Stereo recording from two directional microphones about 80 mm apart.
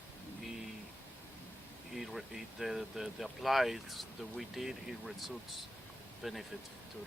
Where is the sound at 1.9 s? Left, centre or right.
Centre.